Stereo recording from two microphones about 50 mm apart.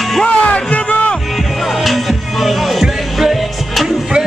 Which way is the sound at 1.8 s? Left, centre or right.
Centre.